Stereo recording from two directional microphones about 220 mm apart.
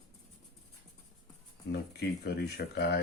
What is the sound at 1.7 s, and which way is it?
Speech, 45° left (ahead or behind).